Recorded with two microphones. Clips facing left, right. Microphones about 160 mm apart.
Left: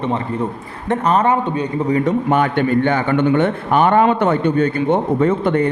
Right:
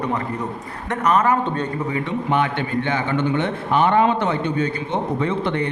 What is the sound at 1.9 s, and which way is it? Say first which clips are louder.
A man's voice: left 7 dB; 45° left (ahead or behind).